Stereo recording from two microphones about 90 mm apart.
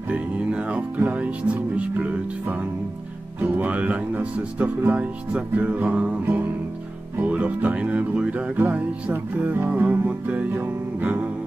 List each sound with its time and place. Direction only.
0.1 s speech: 10° right (ahead or behind)
6.2 s music: 20° right (ahead or behind)
7.2 s speech: 15° right (ahead or behind)